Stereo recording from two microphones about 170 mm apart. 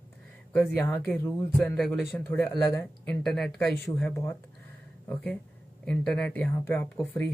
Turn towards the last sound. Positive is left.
turn(degrees=10)  # may be behind; listen again after turning